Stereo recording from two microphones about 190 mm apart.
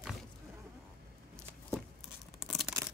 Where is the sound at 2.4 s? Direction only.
Centre (ahead or behind).